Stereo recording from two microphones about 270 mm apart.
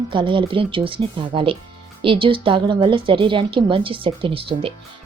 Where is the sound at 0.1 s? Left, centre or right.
Centre.